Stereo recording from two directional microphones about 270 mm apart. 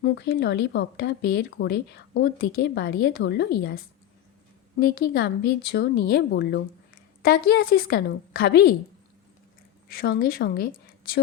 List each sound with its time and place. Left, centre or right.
0.0 s speech: left
4.8 s speech: left
9.9 s a woman's voice: left